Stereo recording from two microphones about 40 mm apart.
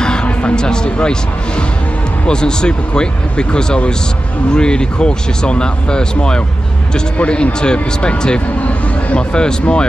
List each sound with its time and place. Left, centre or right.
0.0 s music: left
0.6 s speech: centre
2.2 s speech: left